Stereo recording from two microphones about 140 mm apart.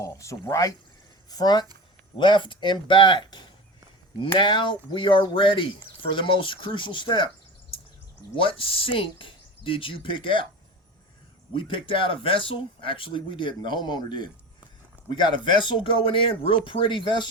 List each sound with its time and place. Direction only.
0.0 s speech: 20° left (ahead or behind)
8.4 s speech: 40° left (ahead or behind)
11.5 s speech: 40° left (ahead or behind)